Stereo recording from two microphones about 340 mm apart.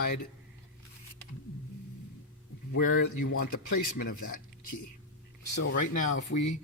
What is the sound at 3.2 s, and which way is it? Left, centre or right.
Speech, left.